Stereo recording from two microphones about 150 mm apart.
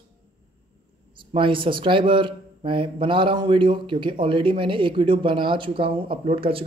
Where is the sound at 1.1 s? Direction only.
35° right (ahead or behind).